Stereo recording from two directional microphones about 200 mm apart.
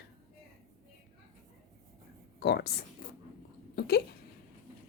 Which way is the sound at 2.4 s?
55° left (ahead or behind).